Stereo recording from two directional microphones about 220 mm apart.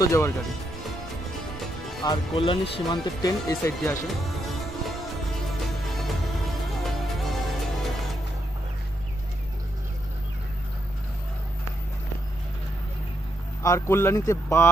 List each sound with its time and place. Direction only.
0.0 s speech: 15° left (ahead or behind)
0.4 s music: centre (ahead or behind)
2.0 s speech: 25° left (ahead or behind)
4.1 s music: centre (ahead or behind)
13.6 s speech: 15° left (ahead or behind)